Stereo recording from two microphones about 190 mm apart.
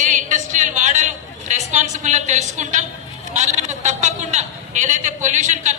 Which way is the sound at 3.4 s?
40° right (ahead or behind).